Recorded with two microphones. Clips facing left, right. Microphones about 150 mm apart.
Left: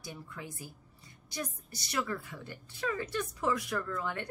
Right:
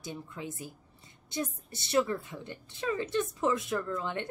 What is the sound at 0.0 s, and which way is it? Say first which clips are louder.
A woman's voice: right 5 dB; 20° right (ahead or behind).